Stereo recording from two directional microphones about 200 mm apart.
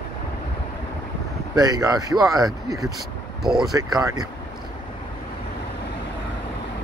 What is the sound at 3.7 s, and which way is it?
Speech, 15° right (ahead or behind).